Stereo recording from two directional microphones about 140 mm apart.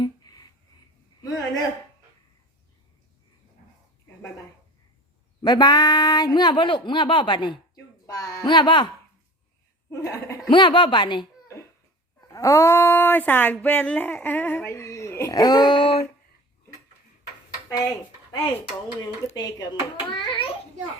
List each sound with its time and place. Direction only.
0.0 s a sound: 30° left (ahead or behind)
5.4 s speech: 30° left (ahead or behind)
9.9 s a woman's voice: 20° left (ahead or behind)
10.5 s speech: 35° left (ahead or behind)
12.3 s speech: 25° left (ahead or behind)
17.7 s dishes: 25° left (ahead or behind)
19.4 s speech: 30° left (ahead or behind)